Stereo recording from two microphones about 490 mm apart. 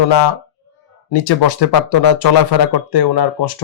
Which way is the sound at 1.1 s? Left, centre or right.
Left.